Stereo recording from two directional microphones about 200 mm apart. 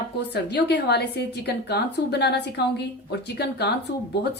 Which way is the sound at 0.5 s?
60° left (ahead or behind).